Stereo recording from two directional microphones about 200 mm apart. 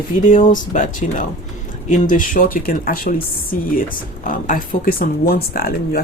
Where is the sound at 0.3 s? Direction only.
40° left (ahead or behind).